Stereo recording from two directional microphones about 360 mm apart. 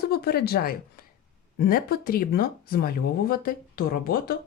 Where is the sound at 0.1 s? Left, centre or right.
Left.